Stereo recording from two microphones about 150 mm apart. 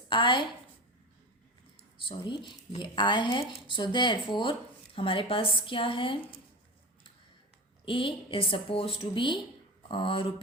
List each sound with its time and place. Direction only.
0.1 s speech: 35° left (ahead or behind)
2.0 s speech: 30° left (ahead or behind)
7.9 s speech: 35° left (ahead or behind)